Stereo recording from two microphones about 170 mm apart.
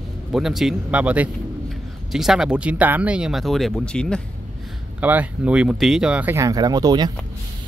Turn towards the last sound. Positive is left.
turn(degrees=-25)  # may be behind; listen again after turning